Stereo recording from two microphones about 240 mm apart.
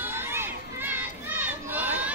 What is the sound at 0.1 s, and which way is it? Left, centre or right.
Crowd, centre.